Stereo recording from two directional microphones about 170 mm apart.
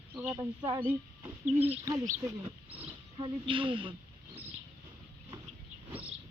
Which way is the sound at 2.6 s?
10° right (ahead or behind).